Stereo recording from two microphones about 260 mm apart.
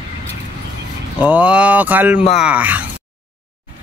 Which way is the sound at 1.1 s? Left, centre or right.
Centre.